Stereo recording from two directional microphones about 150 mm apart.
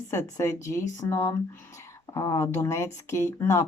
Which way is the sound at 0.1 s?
20° left (ahead or behind).